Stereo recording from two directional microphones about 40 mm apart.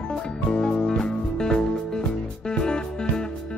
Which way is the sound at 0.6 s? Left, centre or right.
Centre.